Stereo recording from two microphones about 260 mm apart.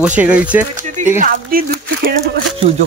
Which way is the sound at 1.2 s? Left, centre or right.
Right.